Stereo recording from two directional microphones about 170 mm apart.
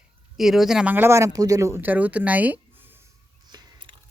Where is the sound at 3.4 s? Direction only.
25° right (ahead or behind).